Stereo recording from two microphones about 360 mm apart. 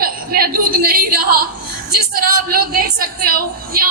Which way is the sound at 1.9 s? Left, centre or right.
Right.